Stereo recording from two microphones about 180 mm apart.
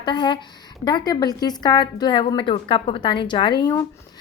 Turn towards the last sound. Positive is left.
turn(degrees=25)  # may be behind; listen again after turning